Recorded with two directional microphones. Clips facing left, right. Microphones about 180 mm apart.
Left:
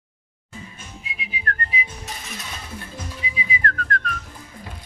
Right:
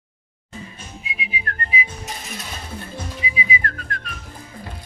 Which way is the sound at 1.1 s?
5° right (ahead or behind).